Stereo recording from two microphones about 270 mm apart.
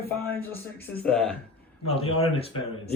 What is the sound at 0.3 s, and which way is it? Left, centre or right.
Speech, centre.